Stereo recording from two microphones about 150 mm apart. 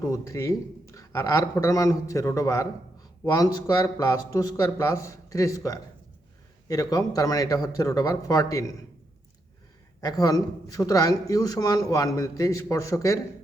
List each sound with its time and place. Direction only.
0.0 s a man's voice: 20° left (ahead or behind)
10.0 s a man's voice: 25° left (ahead or behind)